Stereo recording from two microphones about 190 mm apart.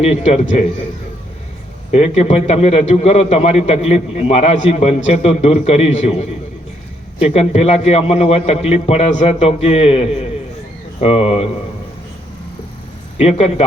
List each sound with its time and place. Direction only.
0.0 s a man's voice: 35° left (ahead or behind)
1.9 s a man's voice: 30° left (ahead or behind)
13.1 s a man's voice: 30° left (ahead or behind)